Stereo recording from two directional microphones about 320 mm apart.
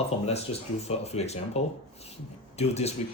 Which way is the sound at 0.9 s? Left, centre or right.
Centre.